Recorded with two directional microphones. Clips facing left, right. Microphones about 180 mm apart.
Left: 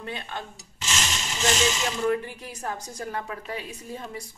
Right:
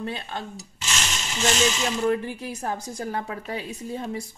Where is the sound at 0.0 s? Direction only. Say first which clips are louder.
Right 3 dB; 35° right (ahead or behind).